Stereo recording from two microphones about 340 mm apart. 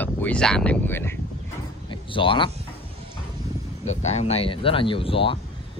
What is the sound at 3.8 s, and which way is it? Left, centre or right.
Speech, centre.